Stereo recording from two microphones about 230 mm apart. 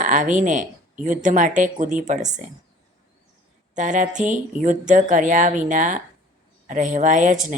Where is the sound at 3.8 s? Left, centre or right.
Right.